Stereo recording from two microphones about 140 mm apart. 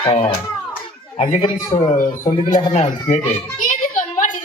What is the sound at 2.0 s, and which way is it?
Speech, 75° left (ahead or behind).